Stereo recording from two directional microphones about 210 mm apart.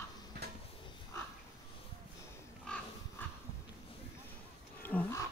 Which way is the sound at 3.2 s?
10° left (ahead or behind).